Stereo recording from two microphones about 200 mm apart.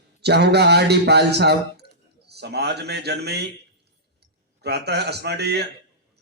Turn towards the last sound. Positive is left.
turn(degrees=-55)  # may be behind; listen again after turning